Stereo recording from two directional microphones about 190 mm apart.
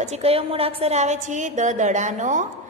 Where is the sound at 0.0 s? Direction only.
35° right (ahead or behind).